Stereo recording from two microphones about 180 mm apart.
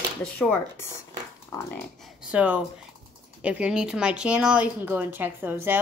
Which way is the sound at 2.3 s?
10° right (ahead or behind).